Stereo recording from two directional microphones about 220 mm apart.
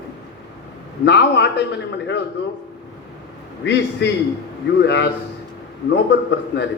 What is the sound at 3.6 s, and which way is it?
A man's voice, 50° left (ahead or behind).